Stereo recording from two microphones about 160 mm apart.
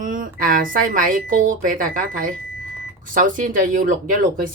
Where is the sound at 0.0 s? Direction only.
55° right (ahead or behind).